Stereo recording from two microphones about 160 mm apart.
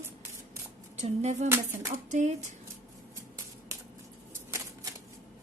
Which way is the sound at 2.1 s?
50° right (ahead or behind).